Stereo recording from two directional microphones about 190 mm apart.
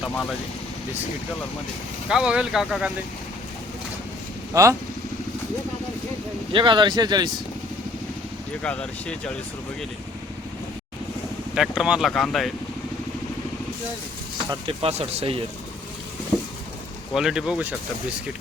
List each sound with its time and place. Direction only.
0.0 s speech: centre (ahead or behind)
2.0 s speech: 5° right (ahead or behind)
4.5 s speech: 15° right (ahead or behind)
6.5 s speech: 25° right (ahead or behind)
8.6 s speech: 5° left (ahead or behind)
11.5 s speech: centre (ahead or behind)
14.5 s speech: 30° right (ahead or behind)
17.2 s speech: 5° right (ahead or behind)